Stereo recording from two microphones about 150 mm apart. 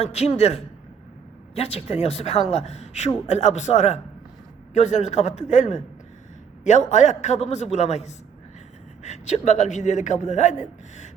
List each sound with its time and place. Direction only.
0.0 s a man's voice: 45° left (ahead or behind)